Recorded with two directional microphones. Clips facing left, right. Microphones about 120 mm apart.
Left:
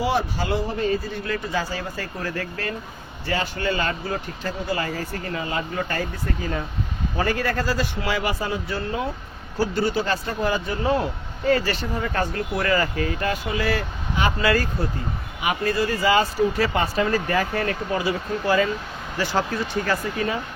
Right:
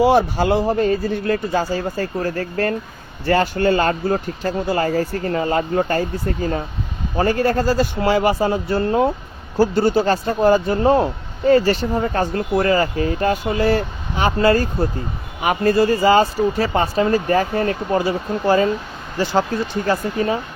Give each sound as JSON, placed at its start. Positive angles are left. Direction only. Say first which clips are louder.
{"t": 0.0, "sound": "speech", "louder": "right 9 dB", "side_deg": -55}
{"t": 15.4, "sound": "speech", "louder": "right 7 dB", "side_deg": -40}
{"t": 19.1, "sound": "speech", "louder": "right 5 dB", "side_deg": -20}